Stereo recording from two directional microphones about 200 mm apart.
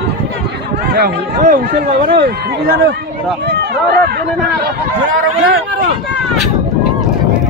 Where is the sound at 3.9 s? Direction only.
55° right (ahead or behind).